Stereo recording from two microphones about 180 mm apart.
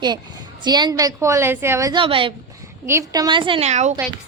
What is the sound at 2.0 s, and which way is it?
Speech, 30° right (ahead or behind).